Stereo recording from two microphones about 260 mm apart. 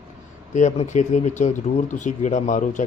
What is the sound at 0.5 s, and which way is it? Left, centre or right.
Speech, left.